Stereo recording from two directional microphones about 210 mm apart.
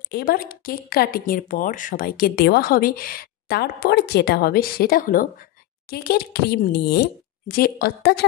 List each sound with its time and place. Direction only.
0.1 s a woman's voice: 45° left (ahead or behind)